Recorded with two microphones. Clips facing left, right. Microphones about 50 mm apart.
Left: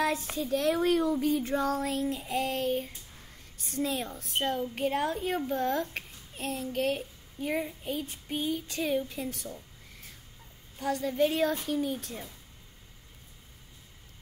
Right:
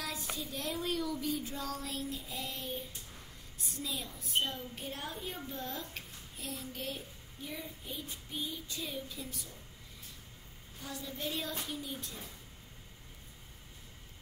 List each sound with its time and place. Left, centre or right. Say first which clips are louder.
0.0 s a sound: left 12 dB; left
0.4 s a woman's voice: left 13 dB; left
10.8 s a woman's voice: left 14 dB; left